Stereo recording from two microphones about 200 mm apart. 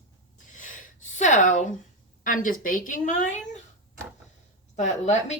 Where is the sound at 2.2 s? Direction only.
40° left (ahead or behind).